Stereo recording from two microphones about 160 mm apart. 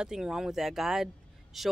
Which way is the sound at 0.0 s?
5° right (ahead or behind).